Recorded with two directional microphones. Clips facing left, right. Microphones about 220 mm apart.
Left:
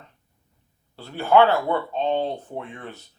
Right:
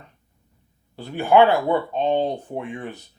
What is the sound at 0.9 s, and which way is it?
Speech, 15° right (ahead or behind).